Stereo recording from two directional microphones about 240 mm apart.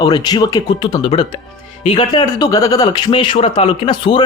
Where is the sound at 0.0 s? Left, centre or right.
Centre.